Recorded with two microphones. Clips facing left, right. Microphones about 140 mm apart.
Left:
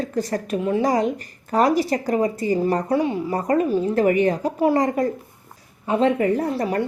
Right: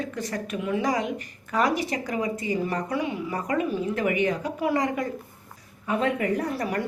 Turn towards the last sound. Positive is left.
turn(degrees=30)  # may be behind; listen again after turning